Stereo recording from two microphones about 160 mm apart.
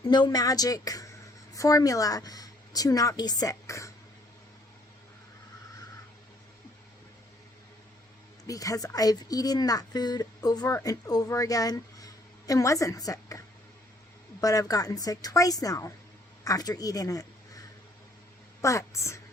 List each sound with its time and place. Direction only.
0.1 s a woman's voice: 25° left (ahead or behind)
8.4 s speech: 20° left (ahead or behind)
14.4 s speech: 20° left (ahead or behind)
18.6 s a woman's voice: 20° left (ahead or behind)